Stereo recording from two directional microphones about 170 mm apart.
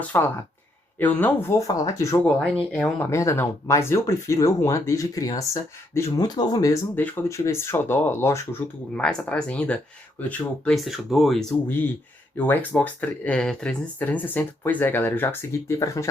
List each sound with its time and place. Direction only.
0.0 s speech: 10° left (ahead or behind)
2.2 s speech: 5° left (ahead or behind); by 6.7 s 20° left (ahead or behind)
6.9 s speech: 10° left (ahead or behind)